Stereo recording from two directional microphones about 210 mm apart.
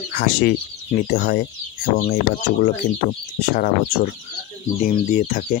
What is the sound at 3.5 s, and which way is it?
Speech, 45° left (ahead or behind).